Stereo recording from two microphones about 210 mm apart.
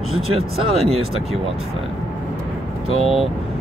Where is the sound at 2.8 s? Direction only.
30° right (ahead or behind).